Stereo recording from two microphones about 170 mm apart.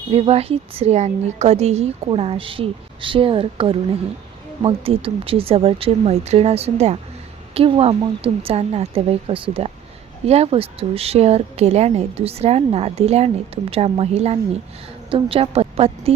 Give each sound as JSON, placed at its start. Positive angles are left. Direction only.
{"t": 0.1, "sound": "a woman's voice", "side_deg": -35}